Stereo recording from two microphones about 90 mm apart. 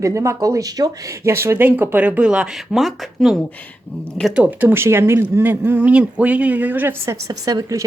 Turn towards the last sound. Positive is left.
turn(degrees=-45)  # may be behind; listen again after turning